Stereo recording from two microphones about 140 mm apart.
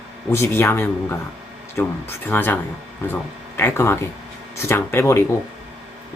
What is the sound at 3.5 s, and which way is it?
Speech, 20° left (ahead or behind).